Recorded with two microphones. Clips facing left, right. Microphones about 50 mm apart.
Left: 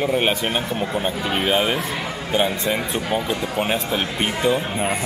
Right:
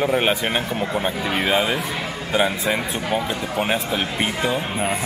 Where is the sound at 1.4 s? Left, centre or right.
Centre.